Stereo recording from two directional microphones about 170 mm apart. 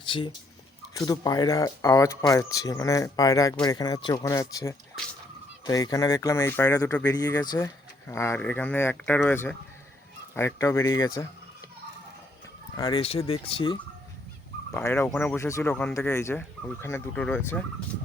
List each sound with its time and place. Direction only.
0.0 s a sound: 30° left (ahead or behind)
0.9 s speech: 20° left (ahead or behind)
7.0 s speech: 20° left (ahead or behind)
12.7 s speech: 20° left (ahead or behind)
13.0 s speech: 35° left (ahead or behind)
14.7 s speech: 15° left (ahead or behind)
15.7 s speech: 5° left (ahead or behind)
16.0 s speech: 15° left (ahead or behind)